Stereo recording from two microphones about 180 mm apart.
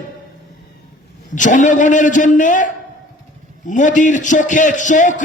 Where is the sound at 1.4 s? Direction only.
45° left (ahead or behind).